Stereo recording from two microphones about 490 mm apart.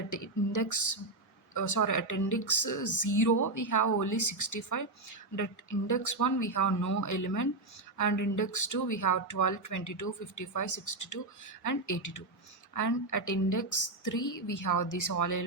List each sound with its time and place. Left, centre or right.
0.1 s speech: left
5.9 s speech: left